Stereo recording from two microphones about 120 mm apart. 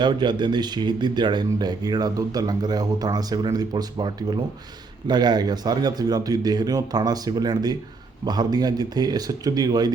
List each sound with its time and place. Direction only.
0.0 s speech: 40° right (ahead or behind)